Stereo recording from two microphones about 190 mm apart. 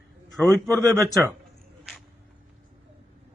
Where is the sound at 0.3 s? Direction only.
Centre (ahead or behind).